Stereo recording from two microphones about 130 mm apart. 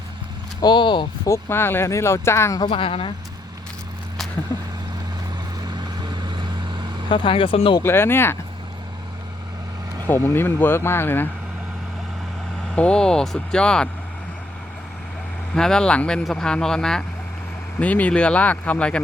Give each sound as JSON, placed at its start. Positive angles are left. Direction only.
{"t": 0.6, "sound": "speech", "side_deg": 35}
{"t": 1.3, "sound": "speech", "side_deg": 20}
{"t": 2.6, "sound": "speech", "side_deg": 40}
{"t": 4.5, "sound": "speech", "side_deg": 25}
{"t": 5.6, "sound": "vehicle", "side_deg": -35}
{"t": 7.1, "sound": "speech", "side_deg": 40}
{"t": 7.8, "sound": "speech", "side_deg": 20}
{"t": 10.1, "sound": "speech", "side_deg": 15}
{"t": 12.7, "sound": "speech", "side_deg": 5}
{"t": 15.5, "sound": "speech", "side_deg": 5}